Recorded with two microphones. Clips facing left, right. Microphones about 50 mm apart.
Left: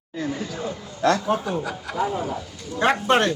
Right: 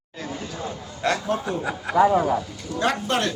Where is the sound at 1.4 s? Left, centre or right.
Right.